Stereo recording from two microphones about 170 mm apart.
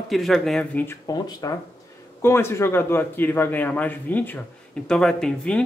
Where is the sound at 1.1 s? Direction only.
20° left (ahead or behind).